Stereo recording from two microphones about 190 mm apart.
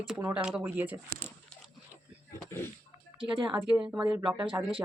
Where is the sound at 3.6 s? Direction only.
5° right (ahead or behind).